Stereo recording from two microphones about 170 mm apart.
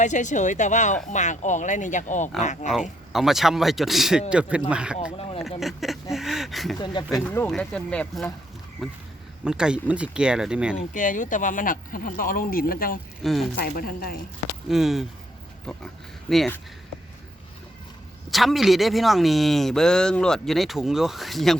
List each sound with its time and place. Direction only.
0.0 s speech: 45° left (ahead or behind)
3.1 s speech: centre (ahead or behind)
5.1 s speech: 35° left (ahead or behind)
5.4 s speech: centre (ahead or behind)
6.7 s speech: 25° left (ahead or behind)
7.3 s speech: 15° left (ahead or behind)
9.4 s speech: 5° right (ahead or behind)
10.8 s speech: 50° left (ahead or behind)
13.2 s speech: centre (ahead or behind)
13.6 s speech: 60° left (ahead or behind)
14.7 s speech: centre (ahead or behind)
18.3 s speech: centre (ahead or behind)